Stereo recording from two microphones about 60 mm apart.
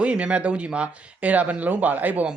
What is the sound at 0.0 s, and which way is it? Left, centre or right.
A man's voice, centre.